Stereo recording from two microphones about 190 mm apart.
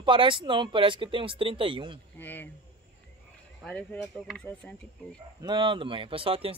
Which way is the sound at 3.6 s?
Centre (ahead or behind).